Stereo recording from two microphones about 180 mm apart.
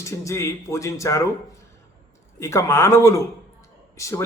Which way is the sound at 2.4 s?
15° left (ahead or behind).